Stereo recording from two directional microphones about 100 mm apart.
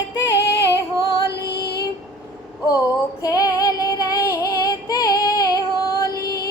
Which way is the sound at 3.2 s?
35° left (ahead or behind).